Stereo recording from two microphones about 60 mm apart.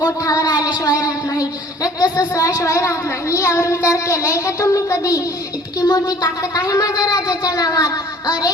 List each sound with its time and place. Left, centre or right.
0.0 s a sound: left
0.9 s a woman's voice: left
5.8 s speech: left